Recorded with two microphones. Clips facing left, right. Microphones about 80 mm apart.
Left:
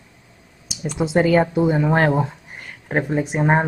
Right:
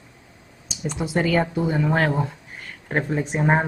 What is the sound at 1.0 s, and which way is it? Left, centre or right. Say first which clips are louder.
Speech: left 5 dB; left.